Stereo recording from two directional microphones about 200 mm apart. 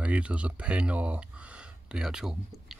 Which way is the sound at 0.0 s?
5° right (ahead or behind).